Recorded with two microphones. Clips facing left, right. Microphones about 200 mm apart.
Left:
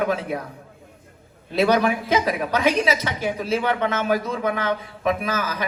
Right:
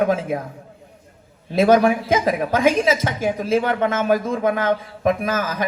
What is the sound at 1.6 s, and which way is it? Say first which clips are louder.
Speech: right 4 dB; 45° right (ahead or behind).